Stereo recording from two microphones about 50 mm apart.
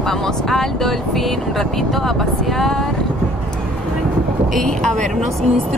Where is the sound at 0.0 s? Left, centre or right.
Centre.